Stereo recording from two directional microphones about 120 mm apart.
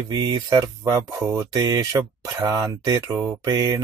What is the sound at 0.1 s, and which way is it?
Speech, 35° right (ahead or behind).